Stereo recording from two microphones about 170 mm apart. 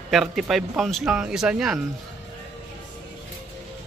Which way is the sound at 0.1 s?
Centre (ahead or behind).